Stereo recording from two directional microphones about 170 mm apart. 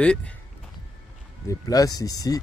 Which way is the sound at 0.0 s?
5° left (ahead or behind).